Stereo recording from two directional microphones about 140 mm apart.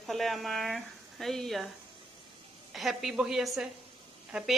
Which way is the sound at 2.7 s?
Centre (ahead or behind).